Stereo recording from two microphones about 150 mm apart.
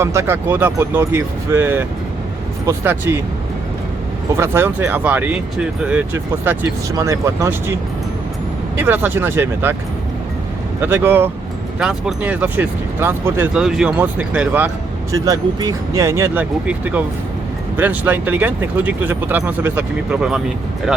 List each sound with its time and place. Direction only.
0.0 s speech: 15° right (ahead or behind)
4.3 s speech: 15° right (ahead or behind)
6.4 s speech: 15° right (ahead or behind)
10.8 s speech: 15° right (ahead or behind)
13.5 s speech: 5° right (ahead or behind)
15.1 s speech: 20° right (ahead or behind); by 20.4 s 5° right (ahead or behind)